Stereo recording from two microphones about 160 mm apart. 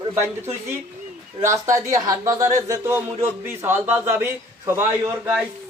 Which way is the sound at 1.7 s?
20° right (ahead or behind).